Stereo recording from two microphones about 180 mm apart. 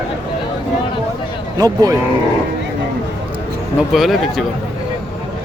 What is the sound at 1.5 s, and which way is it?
Speech, 20° right (ahead or behind).